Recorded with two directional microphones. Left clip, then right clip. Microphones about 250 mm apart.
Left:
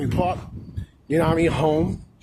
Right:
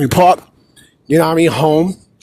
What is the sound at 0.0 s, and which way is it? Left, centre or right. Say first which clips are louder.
Speech: right 14 dB; right.